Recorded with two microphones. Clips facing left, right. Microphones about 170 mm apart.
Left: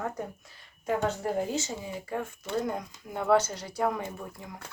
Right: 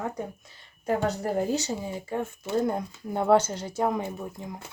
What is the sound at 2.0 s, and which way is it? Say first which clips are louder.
Speech: right 3 dB; 25° right (ahead or behind).